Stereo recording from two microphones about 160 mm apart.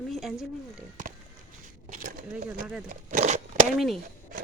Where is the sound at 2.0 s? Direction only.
60° right (ahead or behind).